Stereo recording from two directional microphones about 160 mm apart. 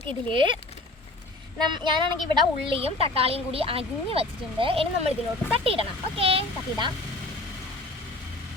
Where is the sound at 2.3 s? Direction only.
35° right (ahead or behind).